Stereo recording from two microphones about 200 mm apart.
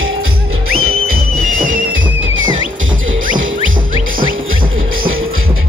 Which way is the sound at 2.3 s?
75° right (ahead or behind).